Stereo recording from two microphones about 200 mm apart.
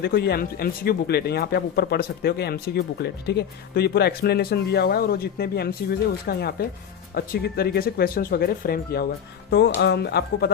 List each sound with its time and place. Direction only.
0.0 s speech: 50° left (ahead or behind)